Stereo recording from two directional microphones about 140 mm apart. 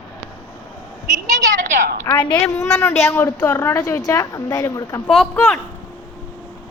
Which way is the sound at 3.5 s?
10° left (ahead or behind).